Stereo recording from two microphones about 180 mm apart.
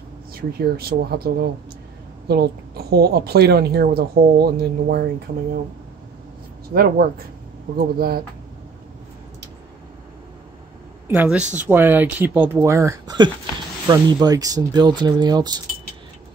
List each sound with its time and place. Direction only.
0.3 s a woman's voice: 55° right (ahead or behind)
6.7 s a woman's voice: 60° right (ahead or behind)
11.1 s speech: 5° right (ahead or behind); by 15.5 s 25° right (ahead or behind)